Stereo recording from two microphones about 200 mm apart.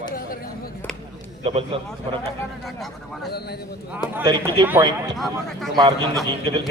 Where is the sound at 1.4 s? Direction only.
30° right (ahead or behind).